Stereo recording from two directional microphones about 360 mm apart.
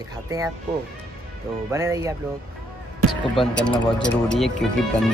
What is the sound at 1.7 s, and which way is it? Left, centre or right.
Speech, centre.